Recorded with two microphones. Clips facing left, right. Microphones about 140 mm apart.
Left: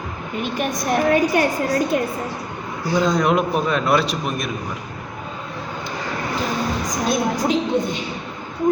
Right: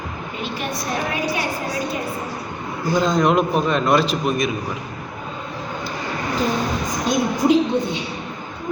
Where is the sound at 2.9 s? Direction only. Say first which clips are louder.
Right 1 dB; 5° left (ahead or behind).